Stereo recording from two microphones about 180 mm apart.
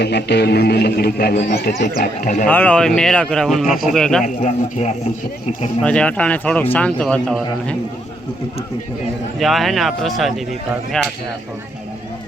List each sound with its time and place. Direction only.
0.0 s a sound: 70° left (ahead or behind)
2.0 s speech: 45° left (ahead or behind)
2.5 s speech: 10° left (ahead or behind)
4.4 s a man's voice: 35° left (ahead or behind)
5.8 s speech: 5° left (ahead or behind)
9.4 s speech: centre (ahead or behind)